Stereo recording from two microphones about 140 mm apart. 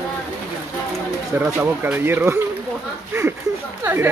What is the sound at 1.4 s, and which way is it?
Speech, 15° right (ahead or behind).